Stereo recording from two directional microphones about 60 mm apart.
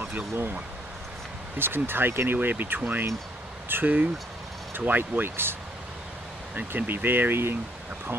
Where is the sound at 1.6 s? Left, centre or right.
Right.